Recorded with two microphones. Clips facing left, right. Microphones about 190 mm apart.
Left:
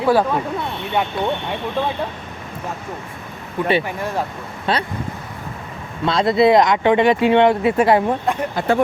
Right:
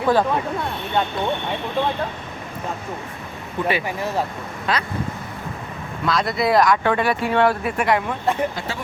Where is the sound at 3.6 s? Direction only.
10° left (ahead or behind).